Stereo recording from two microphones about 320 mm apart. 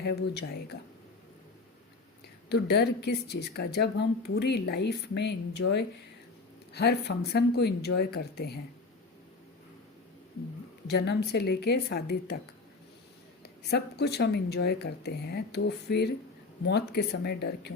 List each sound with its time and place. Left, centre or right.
0.0 s a woman's voice: left
2.5 s a woman's voice: left
10.8 s a woman's voice: left
13.4 s a woman's voice: left